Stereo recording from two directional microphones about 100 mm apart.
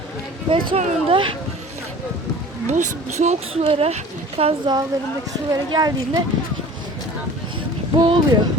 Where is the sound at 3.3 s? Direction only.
70° right (ahead or behind).